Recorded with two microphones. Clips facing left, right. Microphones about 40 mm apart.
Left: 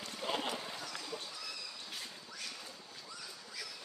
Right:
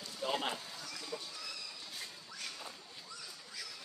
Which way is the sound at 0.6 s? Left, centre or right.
Left.